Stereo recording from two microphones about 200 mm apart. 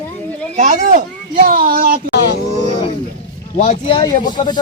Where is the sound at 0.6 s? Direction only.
40° right (ahead or behind).